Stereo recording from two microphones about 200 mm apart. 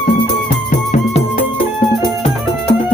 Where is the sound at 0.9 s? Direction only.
30° left (ahead or behind).